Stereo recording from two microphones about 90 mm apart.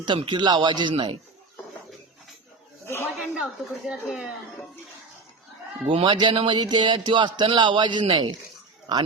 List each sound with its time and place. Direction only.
0.0 s speech: 60° right (ahead or behind)
2.8 s speech: 25° left (ahead or behind)
3.3 s speech: 10° right (ahead or behind)
5.9 s speech: 65° right (ahead or behind)